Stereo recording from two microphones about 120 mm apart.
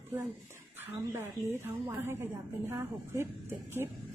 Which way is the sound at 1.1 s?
25° right (ahead or behind).